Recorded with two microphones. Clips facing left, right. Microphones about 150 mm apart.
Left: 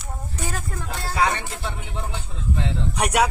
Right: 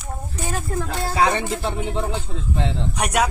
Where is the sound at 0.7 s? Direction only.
35° right (ahead or behind).